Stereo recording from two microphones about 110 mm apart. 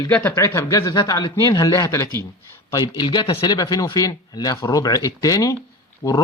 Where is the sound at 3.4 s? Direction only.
35° left (ahead or behind).